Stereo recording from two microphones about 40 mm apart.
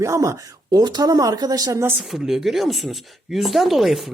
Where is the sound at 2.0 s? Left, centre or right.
Centre.